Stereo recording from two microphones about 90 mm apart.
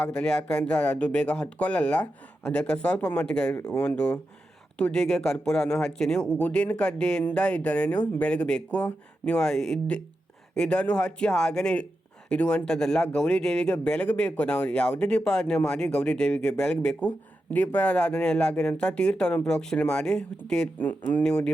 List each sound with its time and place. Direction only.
0.0 s speech: 10° left (ahead or behind)
20.7 s speech: 20° left (ahead or behind)